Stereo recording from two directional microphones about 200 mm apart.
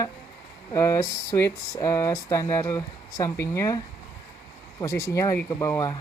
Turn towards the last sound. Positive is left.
turn(degrees=15)  # may be behind; listen again after turning